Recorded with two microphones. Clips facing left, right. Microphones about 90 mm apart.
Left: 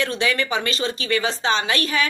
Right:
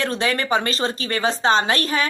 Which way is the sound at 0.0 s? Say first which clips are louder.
Even; 35° right (ahead or behind).